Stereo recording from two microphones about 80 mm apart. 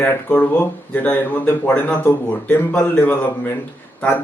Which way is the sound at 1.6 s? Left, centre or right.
Centre.